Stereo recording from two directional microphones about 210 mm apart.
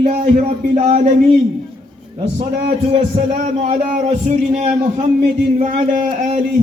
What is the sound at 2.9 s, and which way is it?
A man's voice, 30° right (ahead or behind).